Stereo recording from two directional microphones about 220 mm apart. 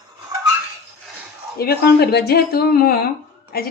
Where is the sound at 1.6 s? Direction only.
45° left (ahead or behind).